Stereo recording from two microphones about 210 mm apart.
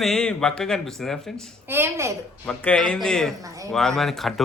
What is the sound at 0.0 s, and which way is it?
A man's voice, centre (ahead or behind).